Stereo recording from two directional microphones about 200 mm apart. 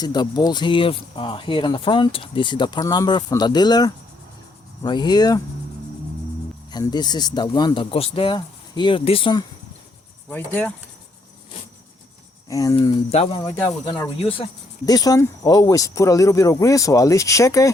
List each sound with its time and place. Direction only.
0.0 s speech: 20° left (ahead or behind)
6.7 s speech: 20° left (ahead or behind)
10.2 s speech: 10° left (ahead or behind)
12.5 s speech: 15° left (ahead or behind)